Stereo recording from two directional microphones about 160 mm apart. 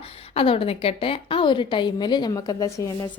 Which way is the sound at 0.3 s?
35° left (ahead or behind).